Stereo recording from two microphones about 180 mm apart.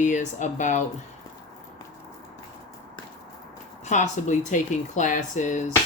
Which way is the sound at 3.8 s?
40° left (ahead or behind).